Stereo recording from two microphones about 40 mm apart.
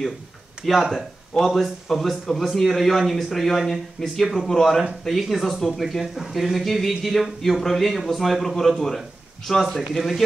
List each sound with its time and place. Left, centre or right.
0.6 s speech: right
0.9 s a man's voice: centre